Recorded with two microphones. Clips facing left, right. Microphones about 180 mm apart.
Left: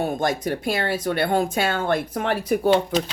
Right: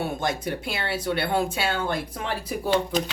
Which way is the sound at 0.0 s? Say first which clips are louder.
Left 4 dB; 45° left (ahead or behind).